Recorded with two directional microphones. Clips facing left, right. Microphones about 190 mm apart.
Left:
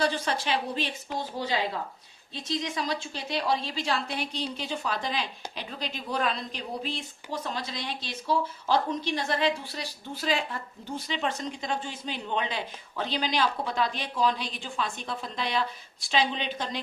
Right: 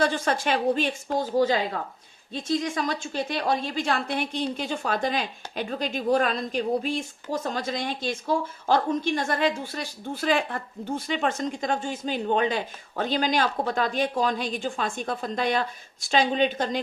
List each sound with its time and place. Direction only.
0.0 s a woman's voice: 50° right (ahead or behind)